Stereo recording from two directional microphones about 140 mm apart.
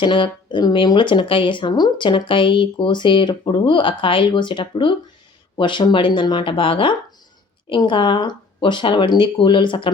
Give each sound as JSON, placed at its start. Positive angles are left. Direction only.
{"t": 0.0, "sound": "speech", "side_deg": 35}